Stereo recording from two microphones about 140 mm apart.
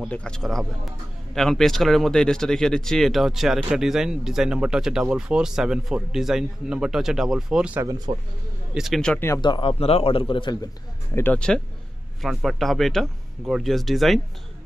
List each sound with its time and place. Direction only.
0.1 s speech: 5° left (ahead or behind)
7.8 s speech: 25° right (ahead or behind)
8.7 s speech: centre (ahead or behind)
9.1 s speech: 15° left (ahead or behind)
9.4 s speech: 35° left (ahead or behind)
11.1 s speech: 10° left (ahead or behind)